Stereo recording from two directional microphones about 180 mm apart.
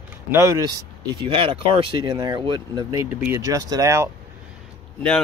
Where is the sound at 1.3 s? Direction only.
30° right (ahead or behind).